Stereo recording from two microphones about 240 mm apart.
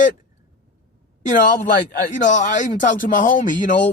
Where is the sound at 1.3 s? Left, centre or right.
Left.